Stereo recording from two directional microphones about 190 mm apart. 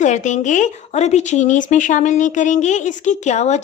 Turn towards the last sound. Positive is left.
turn(degrees=35)  # may be behind; listen again after turning